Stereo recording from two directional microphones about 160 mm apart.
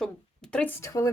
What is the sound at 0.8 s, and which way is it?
Speech, 20° left (ahead or behind).